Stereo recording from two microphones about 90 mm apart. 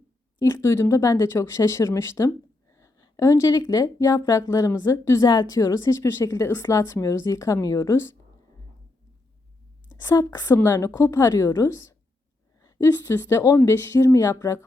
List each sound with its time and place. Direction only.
0.3 s speech: 45° left (ahead or behind)
9.9 s a woman's voice: 45° left (ahead or behind)
10.4 s speech: 30° left (ahead or behind)
10.8 s a woman's voice: 40° left (ahead or behind)
13.2 s speech: 40° left (ahead or behind)
13.7 s speech: 30° left (ahead or behind)